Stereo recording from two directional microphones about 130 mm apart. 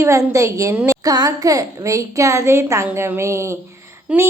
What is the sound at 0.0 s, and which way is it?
Speech, 20° right (ahead or behind).